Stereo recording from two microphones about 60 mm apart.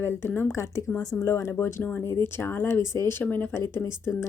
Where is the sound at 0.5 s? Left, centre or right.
Left.